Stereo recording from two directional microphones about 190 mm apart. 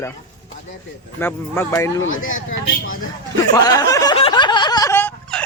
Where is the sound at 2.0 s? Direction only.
90° left.